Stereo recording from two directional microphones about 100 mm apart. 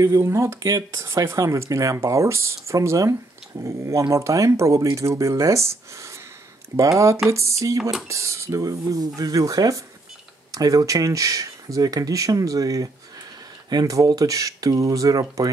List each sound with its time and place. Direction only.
0.0 s speech: 30° right (ahead or behind)
7.2 s speech: 30° right (ahead or behind)